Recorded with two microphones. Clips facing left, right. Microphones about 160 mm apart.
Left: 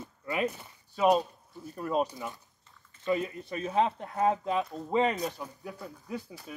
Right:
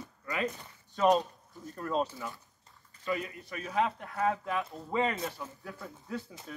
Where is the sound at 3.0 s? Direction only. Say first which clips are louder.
Left 5 dB; 25° left (ahead or behind).